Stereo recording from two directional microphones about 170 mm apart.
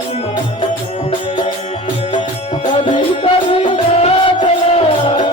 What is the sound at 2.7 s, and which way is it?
Music, 30° left (ahead or behind).